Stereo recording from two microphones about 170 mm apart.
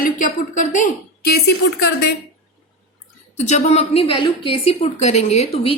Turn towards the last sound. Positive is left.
turn(degrees=35)  # may be behind; listen again after turning